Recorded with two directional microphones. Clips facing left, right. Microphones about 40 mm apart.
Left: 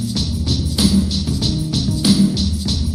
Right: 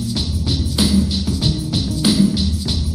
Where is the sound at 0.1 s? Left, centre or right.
Centre.